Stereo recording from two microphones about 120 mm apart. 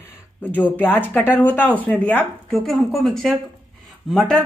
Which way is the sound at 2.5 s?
Centre (ahead or behind).